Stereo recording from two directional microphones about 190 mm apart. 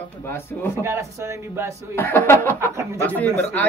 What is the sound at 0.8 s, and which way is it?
Speech, 15° right (ahead or behind).